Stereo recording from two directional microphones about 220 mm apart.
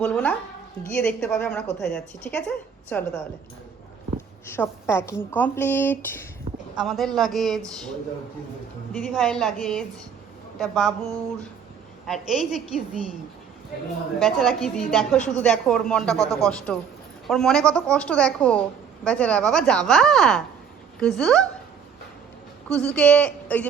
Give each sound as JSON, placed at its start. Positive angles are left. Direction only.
{"t": 0.0, "sound": "a woman's voice", "side_deg": 5}
{"t": 4.4, "sound": "a woman's voice", "side_deg": 10}
{"t": 8.9, "sound": "a woman's voice", "side_deg": 5}
{"t": 12.0, "sound": "a woman's voice", "side_deg": 0}
{"t": 14.2, "sound": "a woman's voice", "side_deg": 0}
{"t": 22.7, "sound": "a woman's voice", "side_deg": 5}